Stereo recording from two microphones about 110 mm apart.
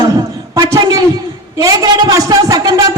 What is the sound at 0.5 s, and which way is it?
Speech, 30° right (ahead or behind).